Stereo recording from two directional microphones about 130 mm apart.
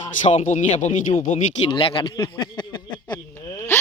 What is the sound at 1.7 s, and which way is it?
Speech, 45° left (ahead or behind).